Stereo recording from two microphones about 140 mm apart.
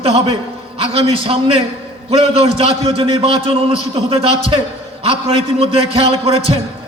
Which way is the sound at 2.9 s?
40° right (ahead or behind).